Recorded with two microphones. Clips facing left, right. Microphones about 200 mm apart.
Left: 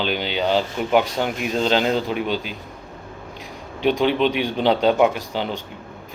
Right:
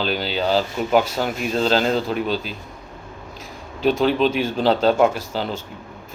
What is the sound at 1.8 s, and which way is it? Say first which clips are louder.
Speech: even; 10° left (ahead or behind).